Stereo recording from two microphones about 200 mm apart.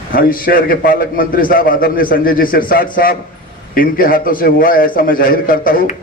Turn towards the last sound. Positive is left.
turn(degrees=45)  # may be behind; listen again after turning